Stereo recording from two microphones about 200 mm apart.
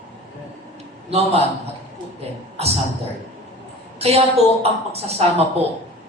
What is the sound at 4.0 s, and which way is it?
A woman's voice, 30° right (ahead or behind).